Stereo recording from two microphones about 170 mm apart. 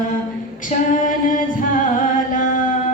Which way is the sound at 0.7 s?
45° left (ahead or behind).